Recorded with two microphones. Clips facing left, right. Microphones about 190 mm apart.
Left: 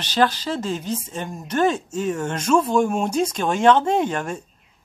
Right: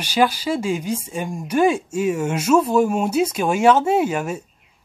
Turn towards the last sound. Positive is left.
turn(degrees=-5)  # may be behind; listen again after turning